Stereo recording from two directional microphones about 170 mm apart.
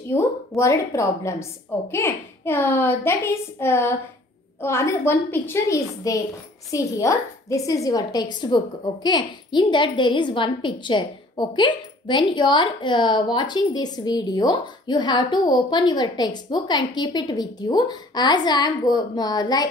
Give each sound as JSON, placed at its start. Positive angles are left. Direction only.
{"t": 0.1, "sound": "a woman's voice", "side_deg": 20}